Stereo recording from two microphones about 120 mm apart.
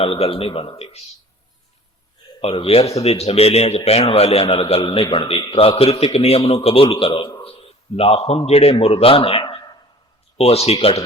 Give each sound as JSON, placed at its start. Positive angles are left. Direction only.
{"t": 0.0, "sound": "a man's voice", "side_deg": 55}
{"t": 2.4, "sound": "a man's voice", "side_deg": 55}
{"t": 5.5, "sound": "a man's voice", "side_deg": 55}